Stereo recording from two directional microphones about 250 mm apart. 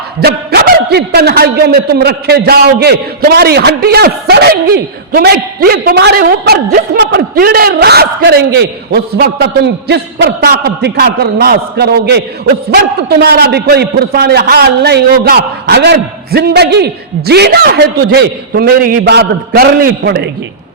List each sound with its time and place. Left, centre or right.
0.2 s a man's voice: right